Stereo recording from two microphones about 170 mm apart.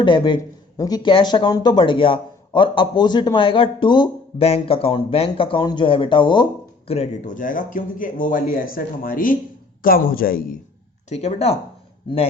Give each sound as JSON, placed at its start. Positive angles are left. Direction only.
{"t": 0.0, "sound": "a man's voice", "side_deg": 30}
{"t": 11.1, "sound": "speech", "side_deg": 40}